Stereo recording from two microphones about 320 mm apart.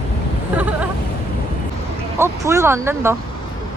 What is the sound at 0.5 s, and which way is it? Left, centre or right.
Speech, centre.